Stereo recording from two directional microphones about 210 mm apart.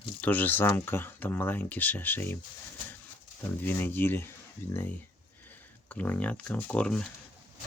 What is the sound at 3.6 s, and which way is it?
Speech, 10° left (ahead or behind).